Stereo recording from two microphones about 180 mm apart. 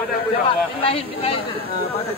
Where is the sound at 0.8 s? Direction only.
30° left (ahead or behind).